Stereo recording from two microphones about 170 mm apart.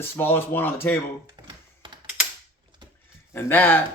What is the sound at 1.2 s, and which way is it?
Computer keyboard, 25° right (ahead or behind).